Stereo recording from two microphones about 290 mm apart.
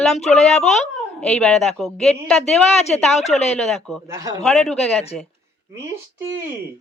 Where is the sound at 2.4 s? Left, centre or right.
Left.